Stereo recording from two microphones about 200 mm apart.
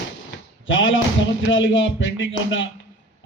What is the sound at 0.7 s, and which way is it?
Speech, 70° left (ahead or behind).